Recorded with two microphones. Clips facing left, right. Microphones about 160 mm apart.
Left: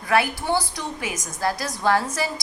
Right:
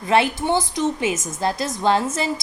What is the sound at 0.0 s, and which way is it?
A woman's voice, 25° right (ahead or behind).